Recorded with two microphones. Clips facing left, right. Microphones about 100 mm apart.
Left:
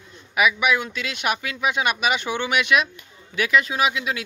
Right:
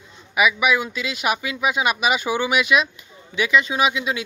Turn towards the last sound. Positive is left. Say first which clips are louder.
# right 2 dB
turn(degrees=0)  # may be behind; listen again after turning